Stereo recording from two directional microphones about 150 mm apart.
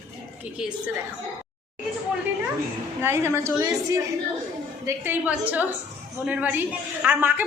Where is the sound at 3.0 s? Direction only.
15° right (ahead or behind).